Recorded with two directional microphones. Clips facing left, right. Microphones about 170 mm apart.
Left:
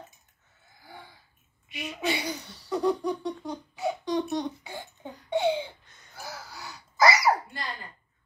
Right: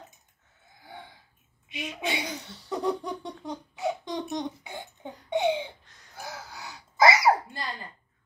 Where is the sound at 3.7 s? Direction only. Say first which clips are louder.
Left 3 dB; 20° right (ahead or behind).